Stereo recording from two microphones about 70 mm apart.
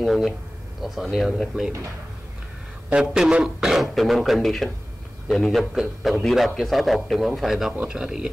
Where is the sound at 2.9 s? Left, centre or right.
Centre.